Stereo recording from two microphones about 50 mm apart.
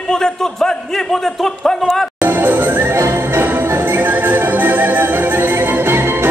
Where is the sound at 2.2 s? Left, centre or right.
Right.